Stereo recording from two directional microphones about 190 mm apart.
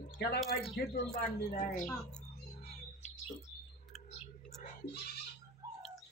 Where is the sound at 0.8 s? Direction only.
60° left (ahead or behind).